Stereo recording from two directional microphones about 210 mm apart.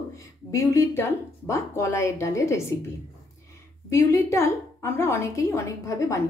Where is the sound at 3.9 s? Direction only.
15° left (ahead or behind).